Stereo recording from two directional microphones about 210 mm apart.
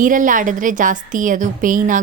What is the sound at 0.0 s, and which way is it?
Cutlery, 40° right (ahead or behind).